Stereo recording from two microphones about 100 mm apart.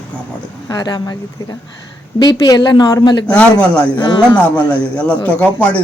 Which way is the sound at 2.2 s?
45° left (ahead or behind).